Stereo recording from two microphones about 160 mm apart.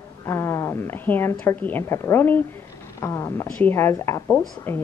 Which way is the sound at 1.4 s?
10° left (ahead or behind).